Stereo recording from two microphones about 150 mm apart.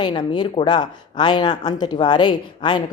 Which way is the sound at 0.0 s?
30° left (ahead or behind).